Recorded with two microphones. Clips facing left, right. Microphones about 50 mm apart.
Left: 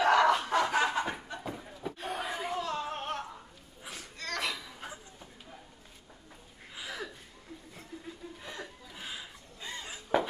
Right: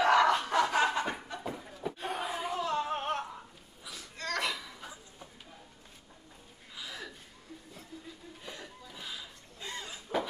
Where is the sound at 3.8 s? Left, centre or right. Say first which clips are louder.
Left 2 dB; left.